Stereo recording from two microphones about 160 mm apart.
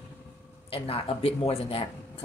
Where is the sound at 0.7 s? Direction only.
35° left (ahead or behind).